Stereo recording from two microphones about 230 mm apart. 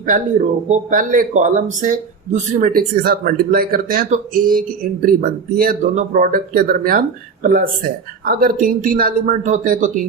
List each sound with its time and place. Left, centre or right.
0.0 s a man's voice: right